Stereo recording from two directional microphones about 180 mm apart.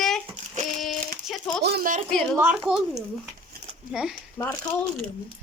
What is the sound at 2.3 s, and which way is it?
Speech, 5° right (ahead or behind).